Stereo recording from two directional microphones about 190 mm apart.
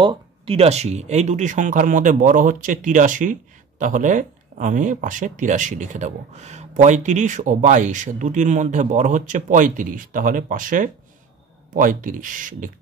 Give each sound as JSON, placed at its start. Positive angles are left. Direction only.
{"t": 0.0, "sound": "speech", "side_deg": -30}